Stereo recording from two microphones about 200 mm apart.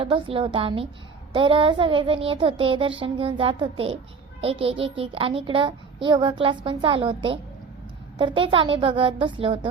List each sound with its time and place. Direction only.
0.0 s a woman's voice: 25° right (ahead or behind)